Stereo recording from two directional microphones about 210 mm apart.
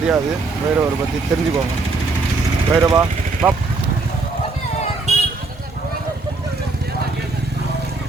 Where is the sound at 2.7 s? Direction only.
15° right (ahead or behind).